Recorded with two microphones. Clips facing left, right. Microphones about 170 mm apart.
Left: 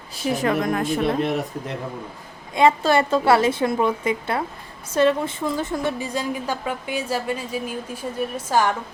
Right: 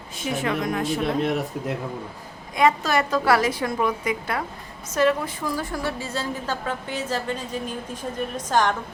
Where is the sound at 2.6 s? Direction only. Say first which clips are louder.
Left 3 dB; 30° left (ahead or behind); by 8.7 s 10° left (ahead or behind).